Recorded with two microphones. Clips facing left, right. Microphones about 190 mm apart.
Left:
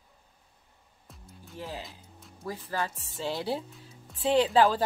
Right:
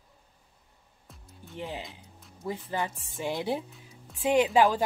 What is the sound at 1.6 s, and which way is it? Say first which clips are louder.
Speech: right 2 dB; 20° right (ahead or behind).